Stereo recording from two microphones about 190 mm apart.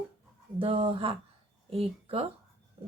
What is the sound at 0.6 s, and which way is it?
Speech, 30° right (ahead or behind).